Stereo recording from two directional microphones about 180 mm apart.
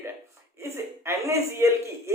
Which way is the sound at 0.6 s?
15° right (ahead or behind).